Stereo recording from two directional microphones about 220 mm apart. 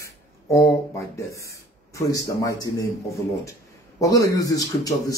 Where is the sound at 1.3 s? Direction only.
15° left (ahead or behind).